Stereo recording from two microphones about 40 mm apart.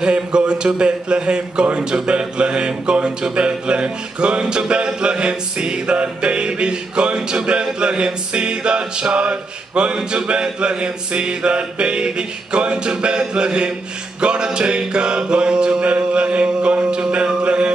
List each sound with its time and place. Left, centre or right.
0.0 s music: right